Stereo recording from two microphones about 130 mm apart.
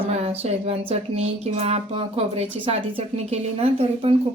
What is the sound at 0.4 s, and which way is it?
Speech, 55° right (ahead or behind).